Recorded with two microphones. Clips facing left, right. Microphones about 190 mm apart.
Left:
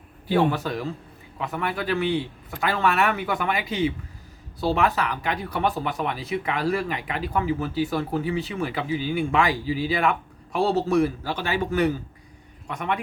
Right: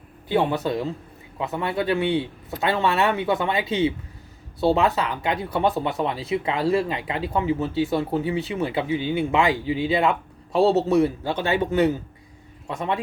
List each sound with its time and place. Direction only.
0.3 s speech: 20° right (ahead or behind)